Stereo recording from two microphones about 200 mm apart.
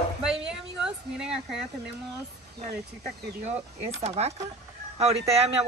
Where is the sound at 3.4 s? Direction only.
35° right (ahead or behind).